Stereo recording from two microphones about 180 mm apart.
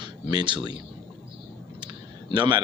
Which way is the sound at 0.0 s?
25° right (ahead or behind).